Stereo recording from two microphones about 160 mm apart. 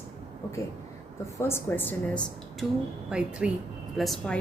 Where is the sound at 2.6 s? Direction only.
5° right (ahead or behind).